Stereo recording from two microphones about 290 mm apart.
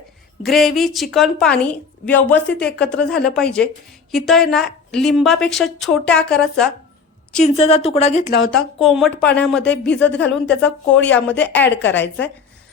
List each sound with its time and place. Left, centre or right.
0.4 s a woman's voice: centre
7.4 s speech: centre
8.5 s a woman's voice: centre